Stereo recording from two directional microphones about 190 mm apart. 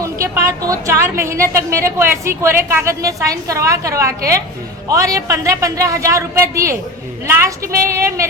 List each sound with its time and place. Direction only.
0.0 s a woman's voice: 15° right (ahead or behind)